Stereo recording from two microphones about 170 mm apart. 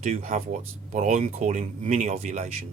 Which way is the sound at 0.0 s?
40° right (ahead or behind).